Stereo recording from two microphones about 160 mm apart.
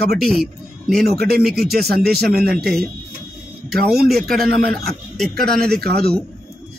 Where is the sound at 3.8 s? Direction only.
75° right (ahead or behind).